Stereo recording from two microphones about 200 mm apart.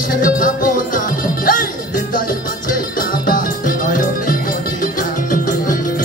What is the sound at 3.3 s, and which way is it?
Music, 45° left (ahead or behind).